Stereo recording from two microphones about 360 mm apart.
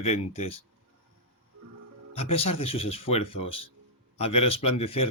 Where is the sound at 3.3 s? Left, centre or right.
Left.